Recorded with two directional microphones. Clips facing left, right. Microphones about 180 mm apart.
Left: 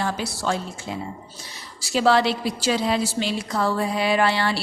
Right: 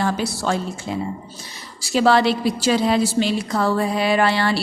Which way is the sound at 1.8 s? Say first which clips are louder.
Right 3 dB; 50° right (ahead or behind).